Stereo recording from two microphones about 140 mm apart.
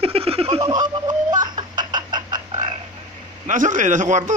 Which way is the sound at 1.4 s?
30° right (ahead or behind).